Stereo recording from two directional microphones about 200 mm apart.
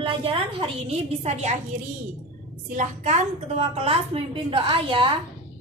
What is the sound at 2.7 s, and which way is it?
A woman's voice, 35° right (ahead or behind).